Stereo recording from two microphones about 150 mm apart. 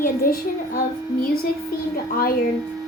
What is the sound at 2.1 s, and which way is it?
Speech, 75° left (ahead or behind).